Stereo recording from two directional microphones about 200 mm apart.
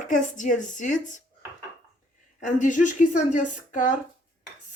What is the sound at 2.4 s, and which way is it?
Speech, 40° left (ahead or behind).